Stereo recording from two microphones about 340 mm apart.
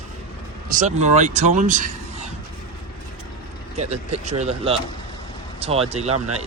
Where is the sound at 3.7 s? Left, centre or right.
Centre.